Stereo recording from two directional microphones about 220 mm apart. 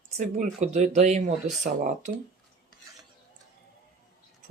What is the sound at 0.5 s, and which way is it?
Cutlery, 30° right (ahead or behind).